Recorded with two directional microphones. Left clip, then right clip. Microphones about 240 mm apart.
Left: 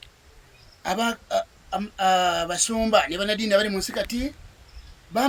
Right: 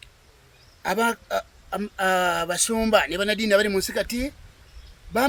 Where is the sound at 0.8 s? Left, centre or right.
Right.